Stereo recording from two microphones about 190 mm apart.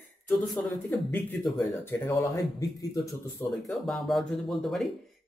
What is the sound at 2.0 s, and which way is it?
Speech, 15° left (ahead or behind).